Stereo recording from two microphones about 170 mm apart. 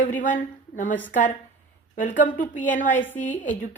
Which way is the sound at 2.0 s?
50° left (ahead or behind).